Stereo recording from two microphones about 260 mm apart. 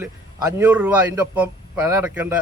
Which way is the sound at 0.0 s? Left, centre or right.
Centre.